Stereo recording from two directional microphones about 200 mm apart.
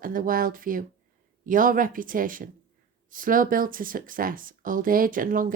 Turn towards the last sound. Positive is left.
turn(degrees=-45)  # may be behind; listen again after turning